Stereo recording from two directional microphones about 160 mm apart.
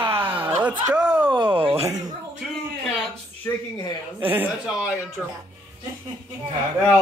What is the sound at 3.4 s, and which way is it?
Speech, 20° left (ahead or behind).